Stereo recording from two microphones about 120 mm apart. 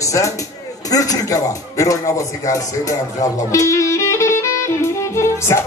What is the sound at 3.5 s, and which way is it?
Music, 25° left (ahead or behind).